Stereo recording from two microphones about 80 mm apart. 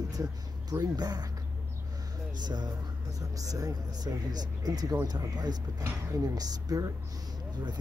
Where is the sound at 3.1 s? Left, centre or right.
Right.